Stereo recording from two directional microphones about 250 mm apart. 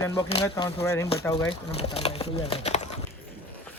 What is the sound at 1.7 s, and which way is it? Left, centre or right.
Speech, left.